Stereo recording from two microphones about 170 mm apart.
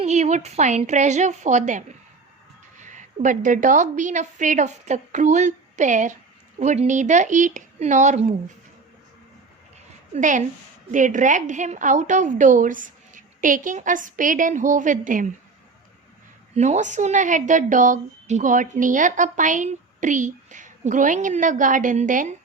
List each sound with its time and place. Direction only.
0.0 s a woman's voice: 40° right (ahead or behind)
10.2 s a woman's voice: 45° right (ahead or behind)
16.6 s a woman's voice: 45° right (ahead or behind)